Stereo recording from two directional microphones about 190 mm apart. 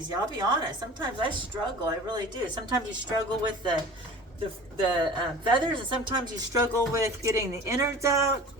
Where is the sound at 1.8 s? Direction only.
25° right (ahead or behind).